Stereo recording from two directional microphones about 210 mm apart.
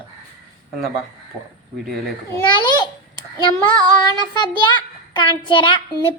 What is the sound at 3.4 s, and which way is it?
Child singing, 20° left (ahead or behind).